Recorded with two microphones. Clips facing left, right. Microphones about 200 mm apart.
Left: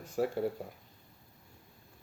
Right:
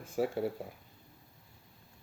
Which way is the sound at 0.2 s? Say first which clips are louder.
Even; 10° right (ahead or behind).